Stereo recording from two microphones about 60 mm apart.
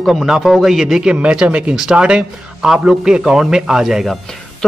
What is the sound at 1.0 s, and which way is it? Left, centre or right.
Speech, centre.